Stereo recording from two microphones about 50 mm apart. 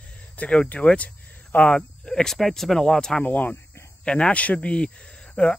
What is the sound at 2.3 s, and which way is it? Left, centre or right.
Speech, centre.